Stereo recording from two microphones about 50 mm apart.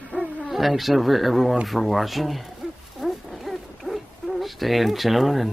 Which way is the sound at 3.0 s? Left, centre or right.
Centre.